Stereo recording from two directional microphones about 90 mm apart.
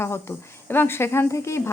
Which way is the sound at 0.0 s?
25° left (ahead or behind).